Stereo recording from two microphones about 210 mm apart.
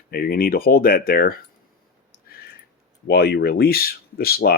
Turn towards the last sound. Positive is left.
turn(degrees=45)  # may be behind; listen again after turning